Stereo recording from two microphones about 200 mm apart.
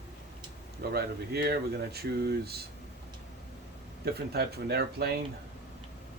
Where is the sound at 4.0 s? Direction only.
50° right (ahead or behind).